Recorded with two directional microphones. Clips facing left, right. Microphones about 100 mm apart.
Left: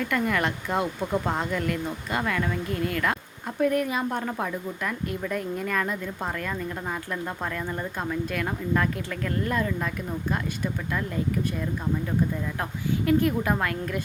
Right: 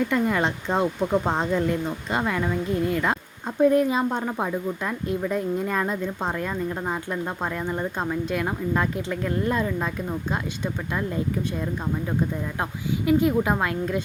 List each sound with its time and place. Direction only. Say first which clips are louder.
0.1 s a woman's voice: right 3 dB; 25° right (ahead or behind)
13.1 s a woman's voice: right 3 dB; 20° right (ahead or behind)